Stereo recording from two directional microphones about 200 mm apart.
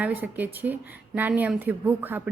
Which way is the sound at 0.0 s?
10° right (ahead or behind).